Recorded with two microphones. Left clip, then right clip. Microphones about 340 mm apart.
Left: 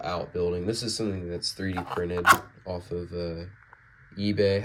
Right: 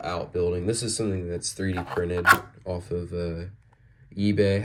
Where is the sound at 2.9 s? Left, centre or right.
Right.